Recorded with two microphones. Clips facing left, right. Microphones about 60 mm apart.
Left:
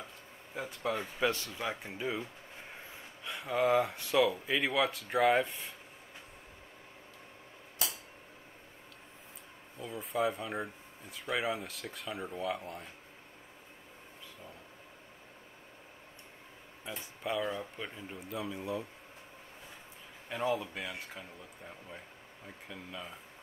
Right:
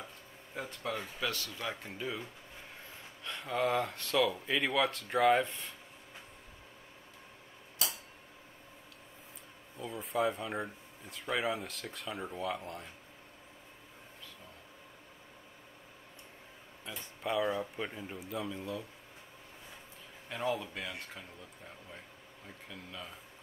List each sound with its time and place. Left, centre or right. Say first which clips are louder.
0.6 s speech: left 3 dB; centre
0.9 s a man's voice: left 6 dB; left
3.3 s speech: left 3 dB; centre
9.8 s speech: even; centre
17.2 s speech: right 3 dB; centre
18.6 s speech: left 3 dB; centre
20.2 s a man's voice: left 2 dB; centre